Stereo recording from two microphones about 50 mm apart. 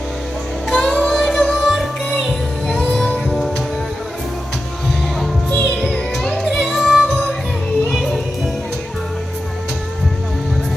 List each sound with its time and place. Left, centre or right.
0.7 s music: centre
1.1 s music: centre
2.6 s music: centre
3.2 s music: centre
5.5 s music: left
5.9 s music: centre